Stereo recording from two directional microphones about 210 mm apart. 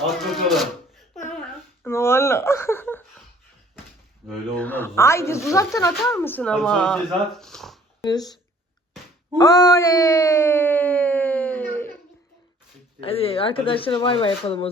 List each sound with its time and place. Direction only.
0.0 s speech: centre (ahead or behind)
1.8 s a sound: 10° left (ahead or behind)
4.3 s speech: 5° left (ahead or behind)
8.0 s speech: 20° left (ahead or behind)
9.4 s speech: 15° left (ahead or behind)
13.0 s speech: 25° left (ahead or behind)